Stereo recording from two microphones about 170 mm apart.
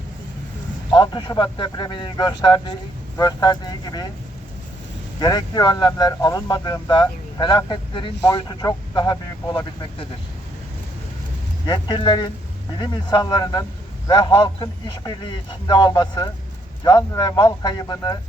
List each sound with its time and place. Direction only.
0.9 s speech: 25° left (ahead or behind)
5.2 s speech: 25° left (ahead or behind)
11.6 s speech: 25° left (ahead or behind)